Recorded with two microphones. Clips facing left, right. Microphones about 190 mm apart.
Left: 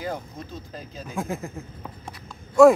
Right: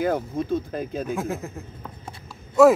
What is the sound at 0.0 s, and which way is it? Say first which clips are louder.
Speech: right 8 dB; 55° right (ahead or behind).